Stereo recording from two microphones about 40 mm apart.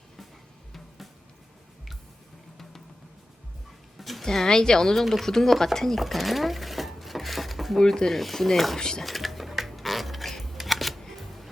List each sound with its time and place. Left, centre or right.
3.9 s a sound: centre
4.3 s a woman's voice: centre
4.9 s rub: centre
5.3 s a woman's voice: centre
6.0 s sewing machine: centre
7.8 s a woman's voice: centre
8.2 s rub: centre
8.8 s a woman's voice: centre
9.0 s a sound: centre
10.6 s camera: centre